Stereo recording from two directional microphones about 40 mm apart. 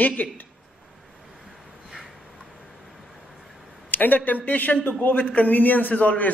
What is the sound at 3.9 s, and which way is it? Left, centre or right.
A man's voice, left.